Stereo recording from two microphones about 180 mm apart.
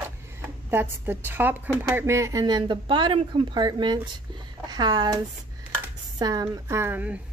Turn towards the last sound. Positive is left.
turn(degrees=-10)  # may be behind; listen again after turning